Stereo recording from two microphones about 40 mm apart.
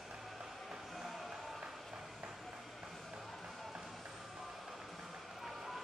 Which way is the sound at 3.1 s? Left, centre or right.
Centre.